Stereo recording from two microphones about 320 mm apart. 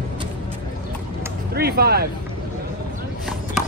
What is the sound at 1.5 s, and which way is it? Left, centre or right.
Speech, right.